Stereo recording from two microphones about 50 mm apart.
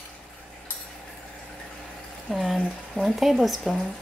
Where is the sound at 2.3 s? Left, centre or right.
Centre.